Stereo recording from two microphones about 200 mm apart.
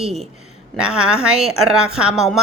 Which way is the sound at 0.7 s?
5° right (ahead or behind).